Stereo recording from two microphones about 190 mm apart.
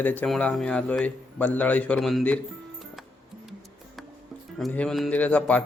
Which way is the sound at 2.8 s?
Centre (ahead or behind).